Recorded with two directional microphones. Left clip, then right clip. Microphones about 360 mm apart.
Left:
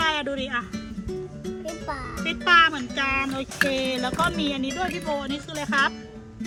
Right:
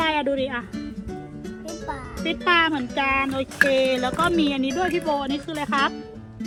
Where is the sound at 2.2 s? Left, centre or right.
Centre.